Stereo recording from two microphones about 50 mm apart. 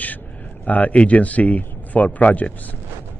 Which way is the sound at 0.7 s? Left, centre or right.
Left.